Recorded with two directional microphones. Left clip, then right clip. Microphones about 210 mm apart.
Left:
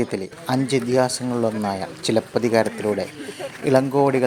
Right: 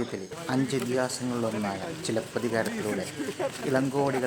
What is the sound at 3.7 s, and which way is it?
Speech, 25° left (ahead or behind).